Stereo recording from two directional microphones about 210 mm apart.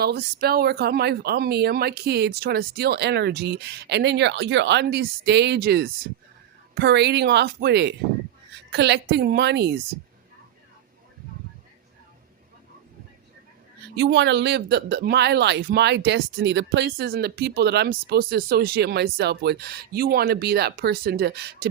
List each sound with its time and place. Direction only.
0.0 s speech: 50° right (ahead or behind)
13.9 s speech: 55° right (ahead or behind)